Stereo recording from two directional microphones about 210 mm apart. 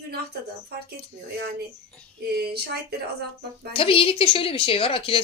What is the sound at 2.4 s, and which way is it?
Speech, 50° right (ahead or behind).